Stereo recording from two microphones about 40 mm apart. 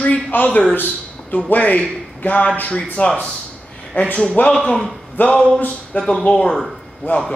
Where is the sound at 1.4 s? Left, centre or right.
Left.